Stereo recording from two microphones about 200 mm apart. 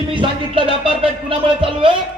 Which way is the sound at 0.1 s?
25° right (ahead or behind).